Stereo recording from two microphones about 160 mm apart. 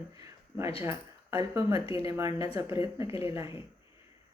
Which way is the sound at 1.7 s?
35° left (ahead or behind).